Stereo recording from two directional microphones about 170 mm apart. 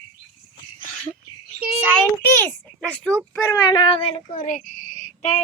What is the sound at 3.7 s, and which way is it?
Speech, 30° left (ahead or behind).